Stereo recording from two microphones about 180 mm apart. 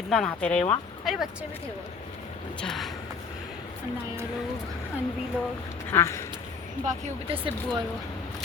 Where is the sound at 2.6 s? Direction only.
Centre (ahead or behind).